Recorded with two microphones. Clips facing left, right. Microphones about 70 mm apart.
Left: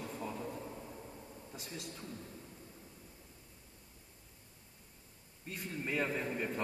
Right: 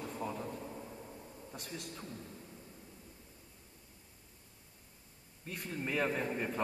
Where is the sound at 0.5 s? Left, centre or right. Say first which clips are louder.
Even; centre.